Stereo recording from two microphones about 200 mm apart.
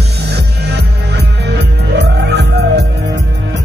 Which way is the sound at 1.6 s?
55° right (ahead or behind).